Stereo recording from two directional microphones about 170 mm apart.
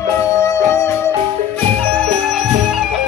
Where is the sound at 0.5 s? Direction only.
15° left (ahead or behind).